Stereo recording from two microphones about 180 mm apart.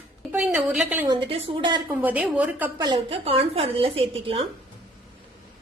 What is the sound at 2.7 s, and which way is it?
A woman's voice, 25° right (ahead or behind).